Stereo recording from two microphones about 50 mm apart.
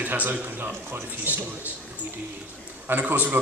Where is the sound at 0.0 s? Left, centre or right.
Right.